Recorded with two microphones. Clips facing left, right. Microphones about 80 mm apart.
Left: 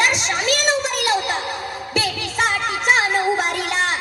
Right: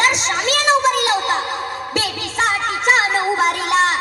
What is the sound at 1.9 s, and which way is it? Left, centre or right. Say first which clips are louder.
Music: even; right.